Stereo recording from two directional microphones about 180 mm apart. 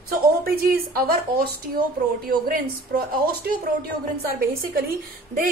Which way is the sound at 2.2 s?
55° right (ahead or behind).